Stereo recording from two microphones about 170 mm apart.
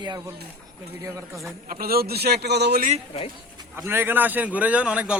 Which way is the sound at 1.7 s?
60° right (ahead or behind).